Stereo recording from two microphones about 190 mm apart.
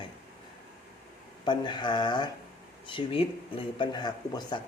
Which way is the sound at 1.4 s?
25° left (ahead or behind).